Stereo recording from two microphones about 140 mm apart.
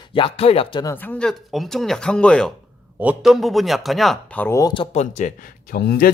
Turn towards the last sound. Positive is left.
turn(degrees=90)